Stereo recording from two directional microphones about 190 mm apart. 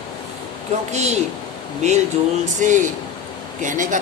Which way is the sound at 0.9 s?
35° right (ahead or behind).